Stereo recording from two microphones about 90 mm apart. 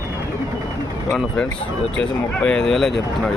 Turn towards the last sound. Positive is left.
turn(degrees=5)  # may be behind; listen again after turning